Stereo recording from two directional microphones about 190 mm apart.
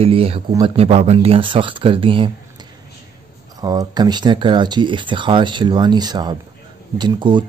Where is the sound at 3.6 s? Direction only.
20° right (ahead or behind).